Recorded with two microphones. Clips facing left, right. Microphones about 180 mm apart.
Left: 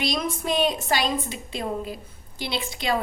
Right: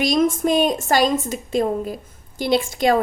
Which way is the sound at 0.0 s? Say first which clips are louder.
Right 9 dB; 45° right (ahead or behind).